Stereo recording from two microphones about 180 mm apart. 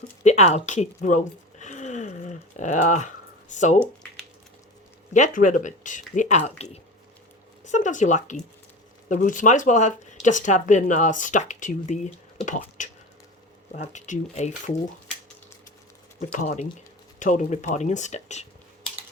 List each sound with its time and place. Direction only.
0.3 s a sound: 40° left (ahead or behind)
3.5 s speech: 40° left (ahead or behind)
5.1 s speech: 45° left (ahead or behind)
7.6 s speech: 45° left (ahead or behind)
16.4 s speech: 45° left (ahead or behind)